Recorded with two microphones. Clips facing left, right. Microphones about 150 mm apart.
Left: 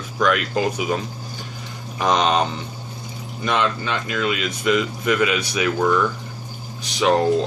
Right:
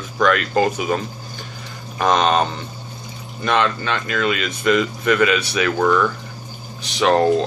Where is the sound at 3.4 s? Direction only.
65° right (ahead or behind).